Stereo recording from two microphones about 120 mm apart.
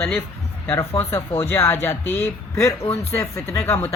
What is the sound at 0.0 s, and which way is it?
Speech, 20° left (ahead or behind).